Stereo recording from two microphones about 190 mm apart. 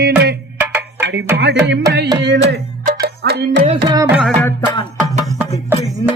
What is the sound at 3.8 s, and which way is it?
Carnatic music, 20° right (ahead or behind).